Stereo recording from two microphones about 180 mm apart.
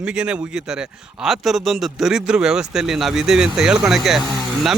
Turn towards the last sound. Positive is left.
turn(degrees=0)  # may be behind; listen again after turning